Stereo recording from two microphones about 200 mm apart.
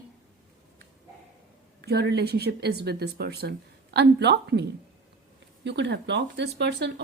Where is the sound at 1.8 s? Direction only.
55° right (ahead or behind).